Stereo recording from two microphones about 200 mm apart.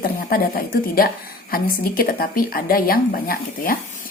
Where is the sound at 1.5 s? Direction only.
45° left (ahead or behind).